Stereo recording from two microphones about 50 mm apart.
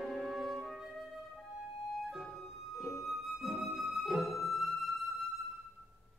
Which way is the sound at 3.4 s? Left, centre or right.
Centre.